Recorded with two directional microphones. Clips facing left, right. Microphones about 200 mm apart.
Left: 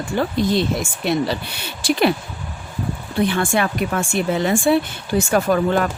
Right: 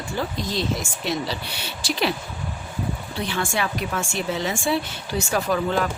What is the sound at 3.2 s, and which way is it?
Speech, 55° left (ahead or behind).